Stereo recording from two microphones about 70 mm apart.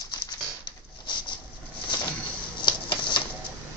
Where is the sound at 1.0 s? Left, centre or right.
Left.